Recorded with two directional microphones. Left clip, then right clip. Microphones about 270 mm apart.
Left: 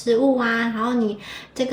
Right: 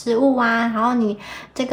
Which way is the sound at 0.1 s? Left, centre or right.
Centre.